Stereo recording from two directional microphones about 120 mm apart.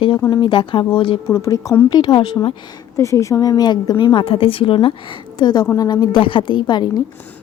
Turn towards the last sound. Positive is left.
turn(degrees=35)  # may be behind; listen again after turning